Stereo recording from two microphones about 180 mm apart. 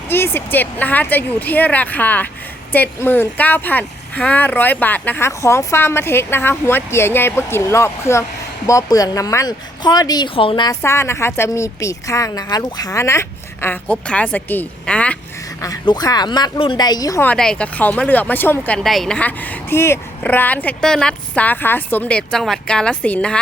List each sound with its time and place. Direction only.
0.1 s speech: 10° left (ahead or behind)
15.6 s speech: 20° left (ahead or behind)
17.2 s speech: 5° left (ahead or behind)